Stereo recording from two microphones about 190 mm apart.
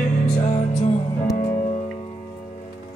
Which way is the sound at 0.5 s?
35° left (ahead or behind).